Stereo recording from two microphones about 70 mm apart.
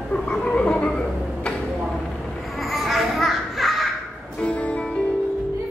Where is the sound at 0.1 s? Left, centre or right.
Centre.